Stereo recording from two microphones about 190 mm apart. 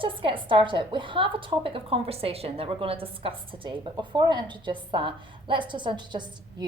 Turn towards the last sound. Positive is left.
turn(degrees=-25)  # may be behind; listen again after turning